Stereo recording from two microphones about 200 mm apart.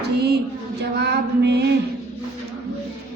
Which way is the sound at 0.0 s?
55° right (ahead or behind).